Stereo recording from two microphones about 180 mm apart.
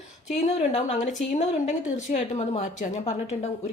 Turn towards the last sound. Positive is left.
turn(degrees=40)  # may be behind; listen again after turning